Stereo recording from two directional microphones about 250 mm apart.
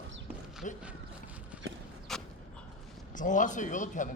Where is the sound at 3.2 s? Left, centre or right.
Left.